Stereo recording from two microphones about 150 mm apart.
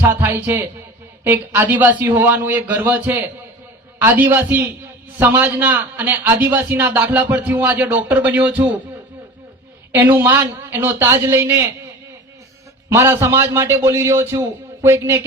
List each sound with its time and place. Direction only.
0.0 s a man's voice: 15° right (ahead or behind)
9.9 s a man's voice: 15° right (ahead or behind)
12.9 s a man's voice: 20° right (ahead or behind)